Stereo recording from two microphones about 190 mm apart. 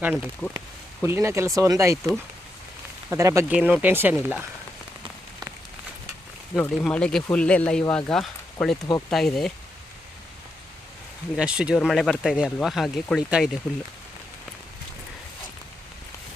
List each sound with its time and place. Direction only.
0.0 s speech: 10° right (ahead or behind)
6.6 s speech: 5° left (ahead or behind)
11.3 s speech: 5° right (ahead or behind)